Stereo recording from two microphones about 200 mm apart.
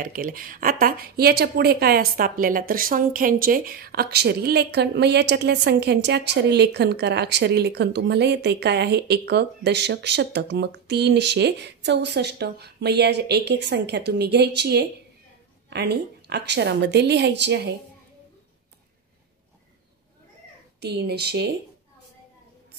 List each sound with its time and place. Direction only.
0.0 s speech: 45° right (ahead or behind); by 17.6 s 60° right (ahead or behind)
20.8 s speech: 55° right (ahead or behind)